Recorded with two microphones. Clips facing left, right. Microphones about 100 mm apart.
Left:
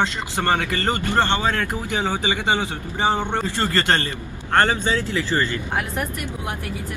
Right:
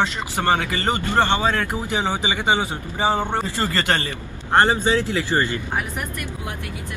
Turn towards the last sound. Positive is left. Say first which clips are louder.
# right 1 dB
turn(degrees=-20)  # may be behind; listen again after turning